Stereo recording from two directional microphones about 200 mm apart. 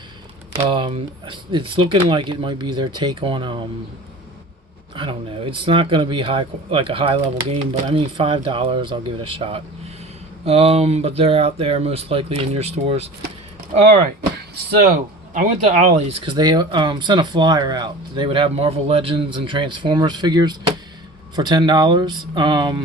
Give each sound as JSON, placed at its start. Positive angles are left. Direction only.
{"t": 0.5, "sound": "speech", "side_deg": -25}
{"t": 4.9, "sound": "speech", "side_deg": -25}